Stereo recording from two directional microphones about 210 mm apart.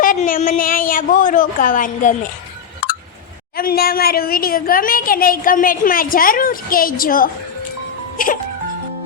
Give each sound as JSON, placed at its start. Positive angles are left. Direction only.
{"t": 0.0, "sound": "a woman's voice", "side_deg": 40}
{"t": 3.5, "sound": "a woman's voice", "side_deg": 45}